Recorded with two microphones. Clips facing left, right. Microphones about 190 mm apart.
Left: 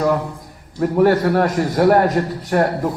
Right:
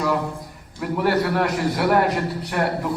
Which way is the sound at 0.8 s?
45° left (ahead or behind).